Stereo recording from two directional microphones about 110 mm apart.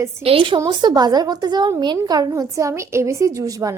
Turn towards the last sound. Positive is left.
turn(degrees=-30)  # may be behind; listen again after turning